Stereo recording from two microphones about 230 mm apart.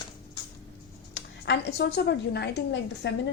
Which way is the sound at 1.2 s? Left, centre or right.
Left.